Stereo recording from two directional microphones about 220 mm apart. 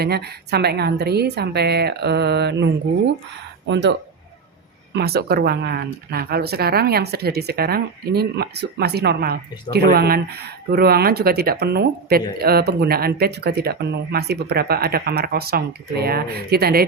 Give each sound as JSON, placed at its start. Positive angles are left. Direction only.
{"t": 0.0, "sound": "speech", "side_deg": -45}
{"t": 3.7, "sound": "speech", "side_deg": -55}
{"t": 4.9, "sound": "speech", "side_deg": -45}